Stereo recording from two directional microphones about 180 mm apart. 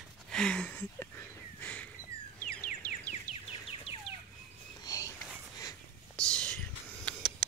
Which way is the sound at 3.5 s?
30° left (ahead or behind).